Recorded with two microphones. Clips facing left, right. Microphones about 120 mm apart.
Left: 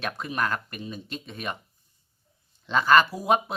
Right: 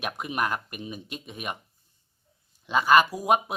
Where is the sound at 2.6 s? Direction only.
10° right (ahead or behind).